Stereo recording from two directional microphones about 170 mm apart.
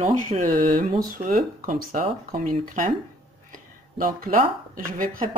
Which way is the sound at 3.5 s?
55° right (ahead or behind).